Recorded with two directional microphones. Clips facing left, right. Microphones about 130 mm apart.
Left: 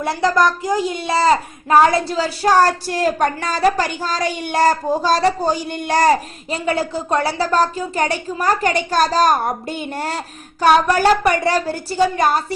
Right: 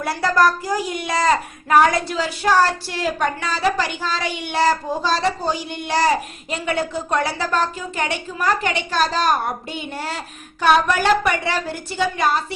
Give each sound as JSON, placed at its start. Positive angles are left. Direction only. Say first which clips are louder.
{"t": 0.0, "sound": "a child's voice", "louder": "left 1 dB", "side_deg": 20}
{"t": 6.5, "sound": "speech", "louder": "left 3 dB", "side_deg": 35}